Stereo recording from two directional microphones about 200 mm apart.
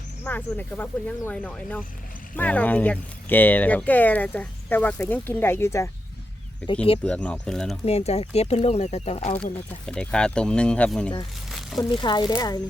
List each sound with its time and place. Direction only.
0.3 s speech: 10° left (ahead or behind)
7.0 s speech: 5° left (ahead or behind)
7.9 s speech: 30° left (ahead or behind)
9.4 s speech: 5° left (ahead or behind)
11.8 s speech: 25° left (ahead or behind)